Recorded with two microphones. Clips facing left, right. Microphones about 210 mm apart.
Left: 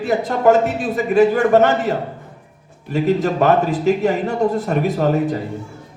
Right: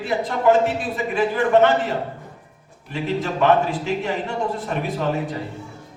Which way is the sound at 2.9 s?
40° left (ahead or behind).